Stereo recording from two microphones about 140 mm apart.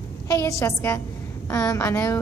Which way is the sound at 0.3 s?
20° left (ahead or behind).